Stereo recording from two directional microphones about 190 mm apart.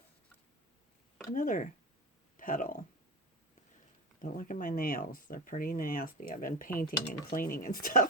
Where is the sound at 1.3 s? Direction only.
45° left (ahead or behind).